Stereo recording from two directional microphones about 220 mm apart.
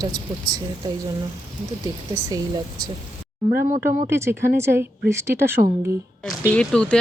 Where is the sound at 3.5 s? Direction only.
40° right (ahead or behind).